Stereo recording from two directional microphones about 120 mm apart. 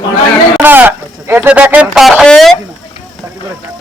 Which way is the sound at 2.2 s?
Centre (ahead or behind).